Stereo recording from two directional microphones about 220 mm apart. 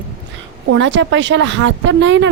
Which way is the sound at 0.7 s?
55° right (ahead or behind).